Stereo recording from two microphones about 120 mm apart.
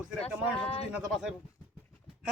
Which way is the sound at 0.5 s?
55° left (ahead or behind).